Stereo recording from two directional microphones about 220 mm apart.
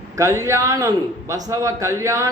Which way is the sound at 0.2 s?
15° right (ahead or behind).